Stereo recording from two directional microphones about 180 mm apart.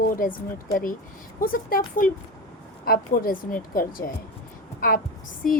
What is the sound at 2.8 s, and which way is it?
A woman's voice, 55° left (ahead or behind).